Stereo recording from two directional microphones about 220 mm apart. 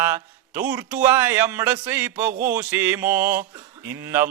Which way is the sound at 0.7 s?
10° right (ahead or behind).